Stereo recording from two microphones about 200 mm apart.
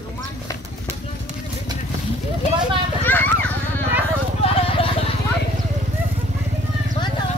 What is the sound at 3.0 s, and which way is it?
Children playing, 10° left (ahead or behind).